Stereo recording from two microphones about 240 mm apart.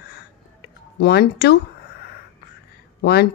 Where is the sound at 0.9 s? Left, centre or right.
Left.